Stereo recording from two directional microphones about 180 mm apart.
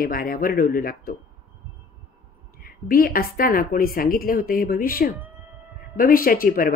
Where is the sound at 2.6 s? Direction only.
55° left (ahead or behind).